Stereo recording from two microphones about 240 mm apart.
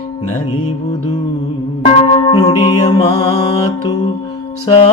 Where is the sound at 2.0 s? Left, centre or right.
Left.